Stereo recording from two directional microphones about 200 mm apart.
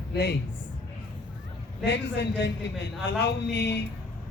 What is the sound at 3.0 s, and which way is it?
Speech, 60° left (ahead or behind).